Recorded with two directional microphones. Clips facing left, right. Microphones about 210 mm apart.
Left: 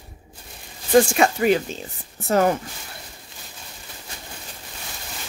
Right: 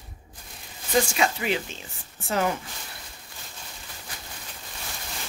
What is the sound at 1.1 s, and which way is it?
Speech, 45° left (ahead or behind).